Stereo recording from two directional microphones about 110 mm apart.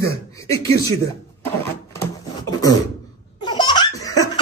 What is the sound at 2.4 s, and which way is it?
Cough, 35° left (ahead or behind).